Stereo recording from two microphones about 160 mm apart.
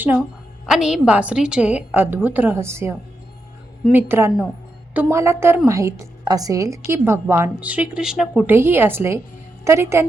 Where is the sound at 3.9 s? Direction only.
15° right (ahead or behind).